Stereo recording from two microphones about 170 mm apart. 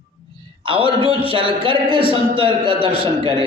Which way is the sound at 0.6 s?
30° right (ahead or behind).